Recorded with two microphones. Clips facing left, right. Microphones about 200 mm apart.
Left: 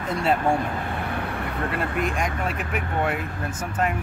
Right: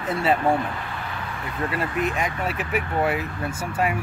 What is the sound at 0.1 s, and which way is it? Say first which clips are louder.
Speech: right 1 dB; 5° right (ahead or behind).